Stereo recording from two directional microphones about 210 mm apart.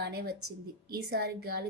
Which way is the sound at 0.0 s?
50° right (ahead or behind).